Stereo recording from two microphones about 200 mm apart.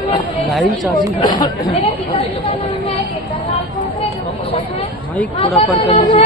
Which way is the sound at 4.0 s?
30° left (ahead or behind).